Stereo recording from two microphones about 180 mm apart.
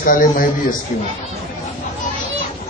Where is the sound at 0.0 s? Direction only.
50° left (ahead or behind).